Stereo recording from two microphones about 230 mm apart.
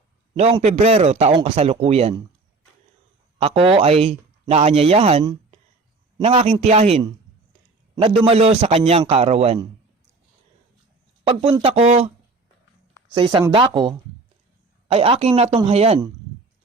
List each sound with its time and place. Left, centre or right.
0.3 s a man's voice: right
3.3 s a man's voice: right
11.2 s a man's voice: right
13.1 s a man's voice: right